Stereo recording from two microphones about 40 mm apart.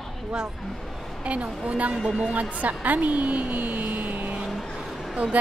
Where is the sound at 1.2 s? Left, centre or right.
Right.